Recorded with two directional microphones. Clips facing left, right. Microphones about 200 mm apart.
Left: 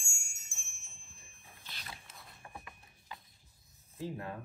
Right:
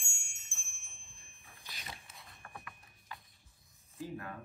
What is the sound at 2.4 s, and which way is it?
Rub, 15° left (ahead or behind).